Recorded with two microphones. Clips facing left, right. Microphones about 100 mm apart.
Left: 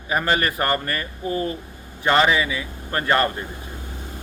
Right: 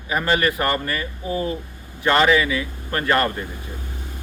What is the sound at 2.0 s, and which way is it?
Speech, 25° left (ahead or behind).